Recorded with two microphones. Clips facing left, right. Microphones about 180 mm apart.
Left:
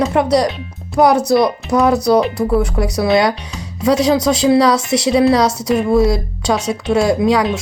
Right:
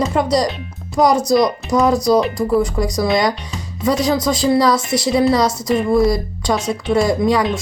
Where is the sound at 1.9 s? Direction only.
65° left (ahead or behind).